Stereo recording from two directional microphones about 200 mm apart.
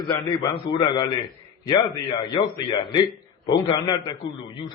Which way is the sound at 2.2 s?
20° left (ahead or behind).